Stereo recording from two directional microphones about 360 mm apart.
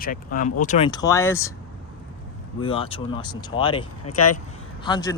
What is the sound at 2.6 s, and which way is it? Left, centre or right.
Speech, centre.